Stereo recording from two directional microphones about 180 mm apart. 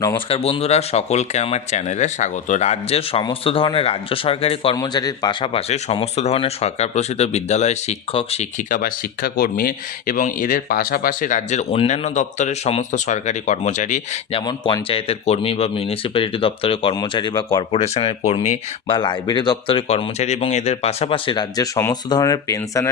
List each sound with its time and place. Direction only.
0.3 s a man's voice: 30° left (ahead or behind)
8.7 s speech: 55° left (ahead or behind)
14.4 s a man's voice: 25° left (ahead or behind)
18.9 s speech: 25° left (ahead or behind)